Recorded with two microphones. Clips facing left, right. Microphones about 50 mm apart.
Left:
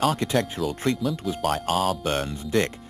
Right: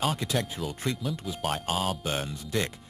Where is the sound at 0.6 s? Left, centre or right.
Left.